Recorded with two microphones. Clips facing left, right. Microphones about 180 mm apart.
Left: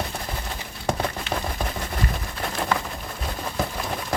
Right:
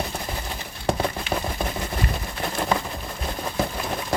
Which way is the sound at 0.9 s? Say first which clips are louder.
Right 2 dB; 5° right (ahead or behind).